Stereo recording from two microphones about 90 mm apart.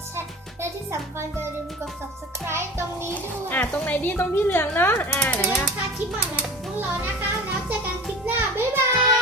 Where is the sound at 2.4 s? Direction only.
30° right (ahead or behind).